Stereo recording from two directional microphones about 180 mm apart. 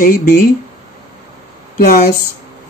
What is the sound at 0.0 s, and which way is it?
Speech, 55° left (ahead or behind).